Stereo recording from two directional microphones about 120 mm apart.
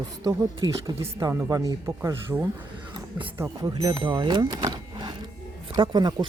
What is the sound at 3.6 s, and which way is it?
Speech, 40° right (ahead or behind).